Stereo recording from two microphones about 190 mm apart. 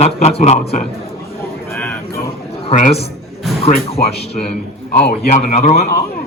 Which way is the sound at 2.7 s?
40° left (ahead or behind).